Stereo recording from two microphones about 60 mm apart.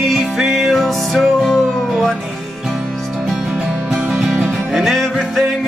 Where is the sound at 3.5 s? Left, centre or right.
Centre.